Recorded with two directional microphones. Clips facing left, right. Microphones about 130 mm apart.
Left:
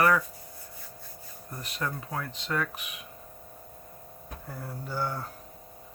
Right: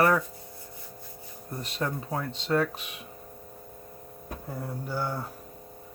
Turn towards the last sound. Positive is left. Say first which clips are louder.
# right 1 dB
turn(degrees=-15)  # may be behind; listen again after turning